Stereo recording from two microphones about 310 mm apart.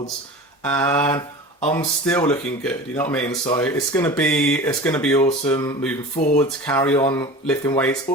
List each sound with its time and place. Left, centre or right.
0.6 s speech: centre
3.2 s speech: centre